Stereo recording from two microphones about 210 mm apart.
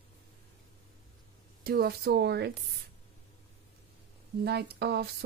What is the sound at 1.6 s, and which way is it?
Speech, 45° right (ahead or behind).